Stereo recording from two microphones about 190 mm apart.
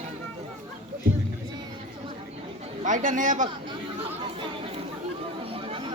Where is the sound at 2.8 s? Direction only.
40° right (ahead or behind).